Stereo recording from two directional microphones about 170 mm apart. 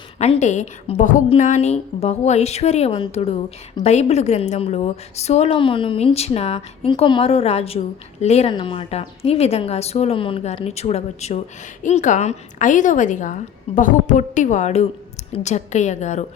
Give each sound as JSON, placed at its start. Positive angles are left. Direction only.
{"t": 0.2, "sound": "a woman's voice", "side_deg": 40}